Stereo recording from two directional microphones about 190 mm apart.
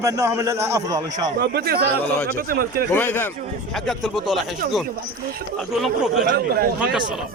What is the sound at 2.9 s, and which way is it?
Speech, 10° left (ahead or behind).